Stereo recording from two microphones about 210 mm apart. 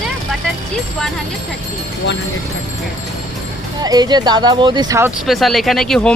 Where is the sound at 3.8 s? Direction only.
20° right (ahead or behind).